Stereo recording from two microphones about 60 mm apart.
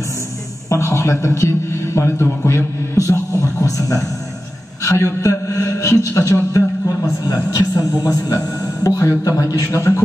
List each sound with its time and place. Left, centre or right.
0.7 s a man's voice: left
3.1 s music: left
4.8 s a man's voice: left
7.2 s speech: left
8.8 s a man's voice: left
9.8 s speech: left